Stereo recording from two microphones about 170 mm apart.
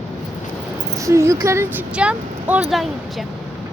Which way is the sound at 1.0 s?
15° right (ahead or behind).